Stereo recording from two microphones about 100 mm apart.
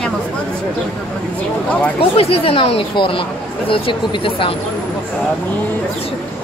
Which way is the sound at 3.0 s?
60° left (ahead or behind).